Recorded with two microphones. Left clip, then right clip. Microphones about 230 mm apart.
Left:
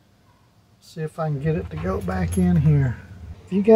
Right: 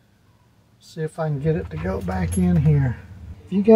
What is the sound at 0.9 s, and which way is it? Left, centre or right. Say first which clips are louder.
Speech: right 1 dB; centre.